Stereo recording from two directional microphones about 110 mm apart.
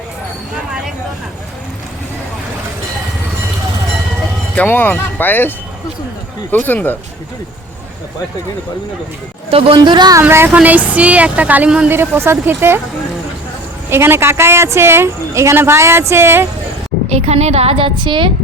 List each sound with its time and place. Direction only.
4.5 s speech: 15° left (ahead or behind)
9.5 s speech: 55° right (ahead or behind); by 10.2 s 40° right (ahead or behind)
10.2 s a woman's voice: 20° right (ahead or behind)
13.9 s a woman's voice: 20° right (ahead or behind)
17.1 s a woman's voice: 70° right (ahead or behind); by 18.3 s 50° right (ahead or behind)